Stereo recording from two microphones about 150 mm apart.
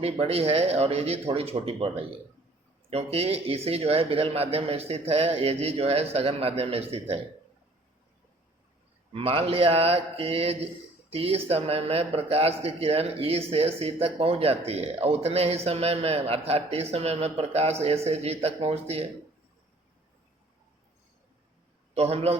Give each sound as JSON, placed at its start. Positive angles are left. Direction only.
{"t": 0.0, "sound": "a man's voice", "side_deg": -40}
{"t": 9.1, "sound": "a man's voice", "side_deg": -40}
{"t": 21.9, "sound": "a man's voice", "side_deg": -45}